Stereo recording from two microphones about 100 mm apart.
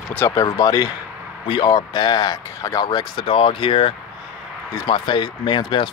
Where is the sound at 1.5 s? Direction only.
50° left (ahead or behind).